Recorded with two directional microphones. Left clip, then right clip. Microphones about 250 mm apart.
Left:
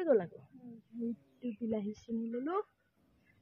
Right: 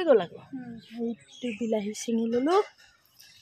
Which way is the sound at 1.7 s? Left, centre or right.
Centre.